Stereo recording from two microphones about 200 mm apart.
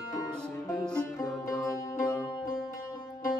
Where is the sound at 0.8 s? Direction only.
5° left (ahead or behind).